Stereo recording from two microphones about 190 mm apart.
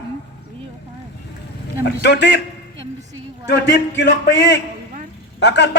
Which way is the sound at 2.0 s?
65° left (ahead or behind).